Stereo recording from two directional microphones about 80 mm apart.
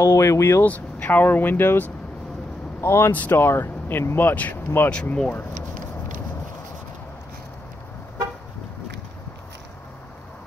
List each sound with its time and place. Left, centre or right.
0.0 s speech: left
0.7 s speech: centre